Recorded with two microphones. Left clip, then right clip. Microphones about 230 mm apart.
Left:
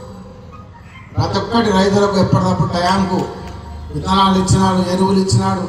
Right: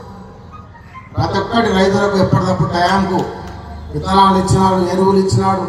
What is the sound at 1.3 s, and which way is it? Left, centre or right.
A man's voice, left.